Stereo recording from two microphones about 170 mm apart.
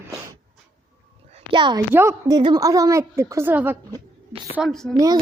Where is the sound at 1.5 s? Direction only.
25° right (ahead or behind).